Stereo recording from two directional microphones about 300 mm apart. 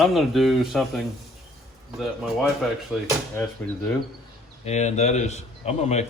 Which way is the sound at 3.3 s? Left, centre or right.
Centre.